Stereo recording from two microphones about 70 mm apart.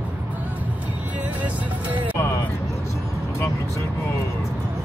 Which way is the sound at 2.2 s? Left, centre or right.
Left.